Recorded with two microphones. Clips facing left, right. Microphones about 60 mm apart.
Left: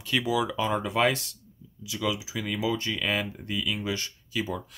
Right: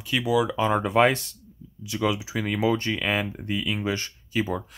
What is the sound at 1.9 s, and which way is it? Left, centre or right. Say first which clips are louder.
Speech: right 4 dB; right.